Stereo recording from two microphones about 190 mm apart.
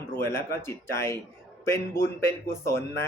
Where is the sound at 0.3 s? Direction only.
15° left (ahead or behind).